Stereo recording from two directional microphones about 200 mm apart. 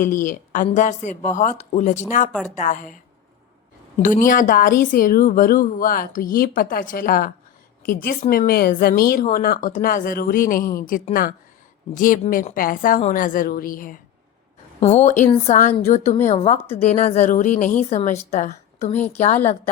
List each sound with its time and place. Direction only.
0.0 s speech: 40° left (ahead or behind)
4.0 s a woman's voice: 40° left (ahead or behind)